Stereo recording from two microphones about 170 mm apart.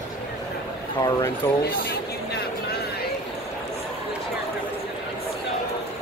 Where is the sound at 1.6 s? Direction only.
70° left (ahead or behind).